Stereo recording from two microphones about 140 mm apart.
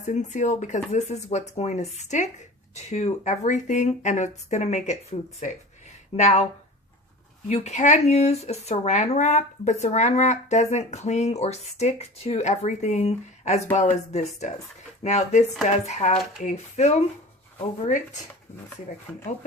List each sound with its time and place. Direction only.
0.0 s speech: 55° left (ahead or behind)
7.4 s speech: 55° left (ahead or behind)